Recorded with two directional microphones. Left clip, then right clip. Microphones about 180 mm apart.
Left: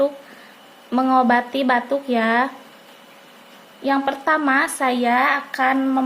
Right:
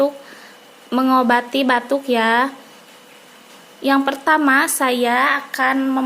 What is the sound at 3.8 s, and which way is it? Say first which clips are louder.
A woman's voice: right 3 dB; 20° right (ahead or behind).